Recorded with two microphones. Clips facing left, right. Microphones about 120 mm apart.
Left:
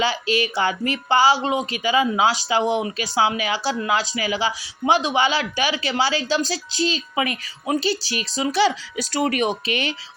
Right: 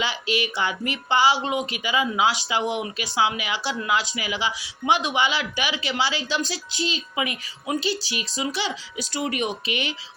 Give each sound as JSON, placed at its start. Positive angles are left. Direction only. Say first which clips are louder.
{"t": 0.0, "sound": "speech", "louder": "left 4 dB", "side_deg": 40}